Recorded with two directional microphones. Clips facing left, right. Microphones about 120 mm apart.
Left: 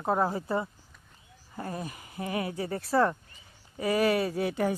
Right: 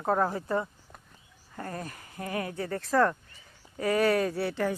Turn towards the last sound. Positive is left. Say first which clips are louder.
# left 1 dB
turn(degrees=15)  # may be behind; listen again after turning